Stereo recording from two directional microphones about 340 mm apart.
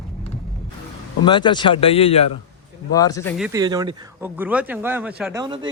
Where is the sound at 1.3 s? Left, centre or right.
Centre.